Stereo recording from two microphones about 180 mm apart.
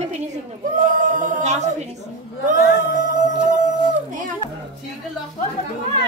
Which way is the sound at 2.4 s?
45° right (ahead or behind).